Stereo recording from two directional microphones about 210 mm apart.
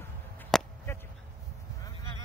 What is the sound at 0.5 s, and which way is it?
Chop, centre (ahead or behind).